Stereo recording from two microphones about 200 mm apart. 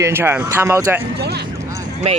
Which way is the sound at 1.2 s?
55° right (ahead or behind).